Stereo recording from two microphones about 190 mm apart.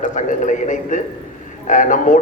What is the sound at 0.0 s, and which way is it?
A man's voice, 40° left (ahead or behind).